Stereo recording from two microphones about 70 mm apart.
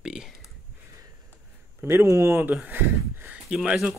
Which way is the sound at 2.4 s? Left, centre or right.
Right.